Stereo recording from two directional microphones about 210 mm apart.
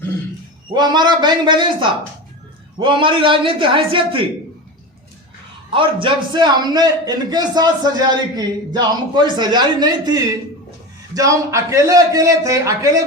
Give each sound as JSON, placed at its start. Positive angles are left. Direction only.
{"t": 0.7, "sound": "a man's voice", "side_deg": -20}
{"t": 5.7, "sound": "a man's voice", "side_deg": -25}